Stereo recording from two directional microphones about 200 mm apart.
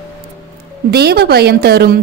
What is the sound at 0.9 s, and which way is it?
A woman's voice, 55° right (ahead or behind).